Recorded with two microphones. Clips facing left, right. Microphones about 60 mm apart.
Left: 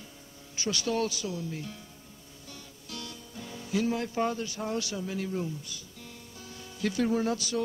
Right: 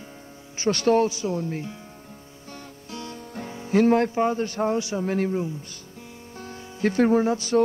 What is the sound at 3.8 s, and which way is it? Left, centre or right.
Speech, right.